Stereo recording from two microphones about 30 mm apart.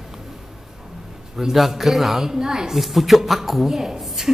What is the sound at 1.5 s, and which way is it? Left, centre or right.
Speech, centre.